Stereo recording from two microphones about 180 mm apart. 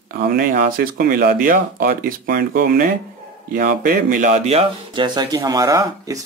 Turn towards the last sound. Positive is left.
turn(degrees=-20)  # may be behind; listen again after turning